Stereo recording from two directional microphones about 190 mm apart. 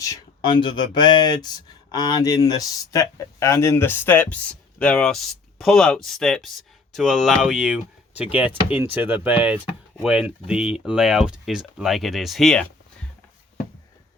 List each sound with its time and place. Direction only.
0.0 s speech: 20° left (ahead or behind); by 12.6 s centre (ahead or behind)